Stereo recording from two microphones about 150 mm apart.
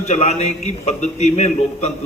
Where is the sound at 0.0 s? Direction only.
45° left (ahead or behind).